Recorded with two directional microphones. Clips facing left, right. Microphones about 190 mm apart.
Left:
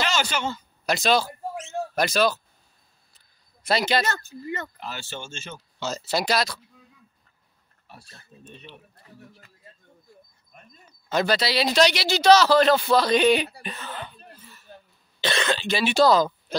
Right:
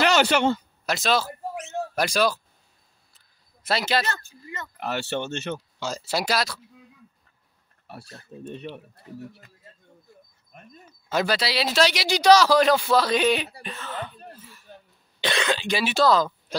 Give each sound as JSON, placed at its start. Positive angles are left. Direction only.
{"t": 0.0, "sound": "speech", "side_deg": -65}
{"t": 0.8, "sound": "speech", "side_deg": 0}
{"t": 3.2, "sound": "a sound", "side_deg": 0}
{"t": 4.1, "sound": "speech", "side_deg": 35}
{"t": 4.7, "sound": "speech", "side_deg": -65}
{"t": 5.8, "sound": "speech", "side_deg": -10}
{"t": 7.8, "sound": "a sound", "side_deg": -65}
{"t": 10.9, "sound": "speech", "side_deg": -5}
{"t": 15.1, "sound": "speech", "side_deg": -15}
{"t": 15.9, "sound": "speech", "side_deg": 0}